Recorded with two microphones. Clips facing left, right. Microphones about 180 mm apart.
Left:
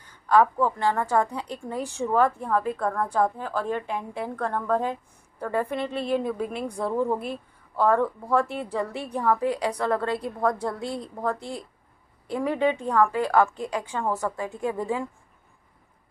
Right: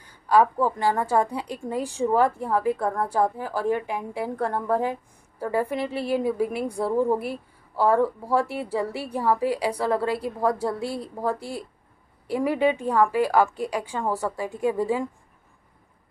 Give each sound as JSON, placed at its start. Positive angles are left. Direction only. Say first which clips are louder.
{"t": 0.0, "sound": "a woman's voice", "louder": "right 1 dB", "side_deg": -10}